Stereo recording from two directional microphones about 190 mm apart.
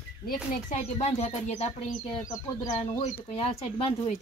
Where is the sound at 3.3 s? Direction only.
30° left (ahead or behind).